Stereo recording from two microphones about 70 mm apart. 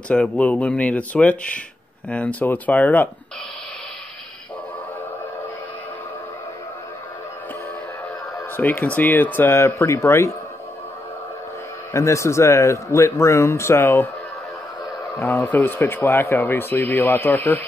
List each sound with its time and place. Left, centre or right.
0.1 s speech: centre
8.4 s speech: left
9.6 s speech: left
11.9 s speech: left
15.1 s speech: left